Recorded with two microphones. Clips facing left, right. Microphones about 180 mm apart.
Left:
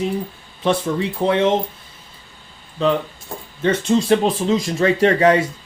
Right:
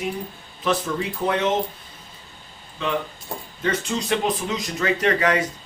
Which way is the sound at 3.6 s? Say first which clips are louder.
Left 8 dB; 30° left (ahead or behind).